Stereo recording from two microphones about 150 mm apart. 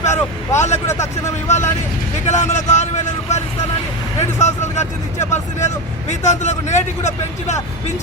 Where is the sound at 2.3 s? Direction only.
50° left (ahead or behind).